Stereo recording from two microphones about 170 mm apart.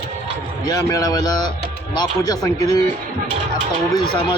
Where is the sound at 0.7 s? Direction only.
20° left (ahead or behind).